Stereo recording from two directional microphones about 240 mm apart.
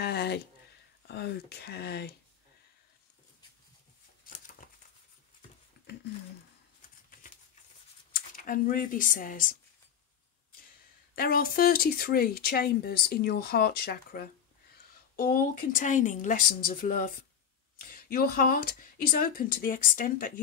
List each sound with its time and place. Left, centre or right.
0.0 s a sound: left
1.0 s speech: left
4.3 s crumpling: left
8.1 s speech: left
11.1 s speech: left